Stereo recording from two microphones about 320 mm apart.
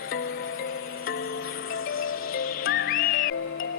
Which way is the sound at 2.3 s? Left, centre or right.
Left.